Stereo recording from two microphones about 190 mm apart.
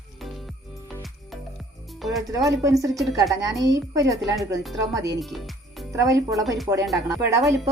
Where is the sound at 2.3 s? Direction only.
15° right (ahead or behind).